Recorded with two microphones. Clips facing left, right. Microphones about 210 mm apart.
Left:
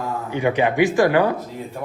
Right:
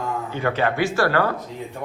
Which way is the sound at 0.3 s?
15° left (ahead or behind).